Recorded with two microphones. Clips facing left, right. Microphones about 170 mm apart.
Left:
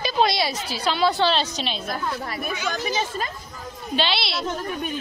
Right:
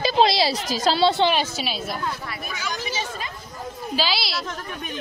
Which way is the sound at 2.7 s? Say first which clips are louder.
Left 3 dB; 45° left (ahead or behind).